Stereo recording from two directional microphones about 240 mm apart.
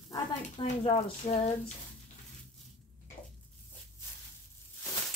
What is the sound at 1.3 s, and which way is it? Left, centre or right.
Speech, left.